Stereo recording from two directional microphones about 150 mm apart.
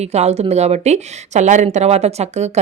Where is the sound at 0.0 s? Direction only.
45° right (ahead or behind).